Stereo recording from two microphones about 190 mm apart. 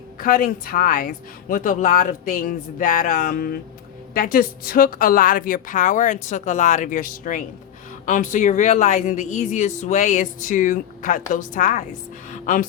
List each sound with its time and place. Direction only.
0.2 s a woman's voice: 45° left (ahead or behind)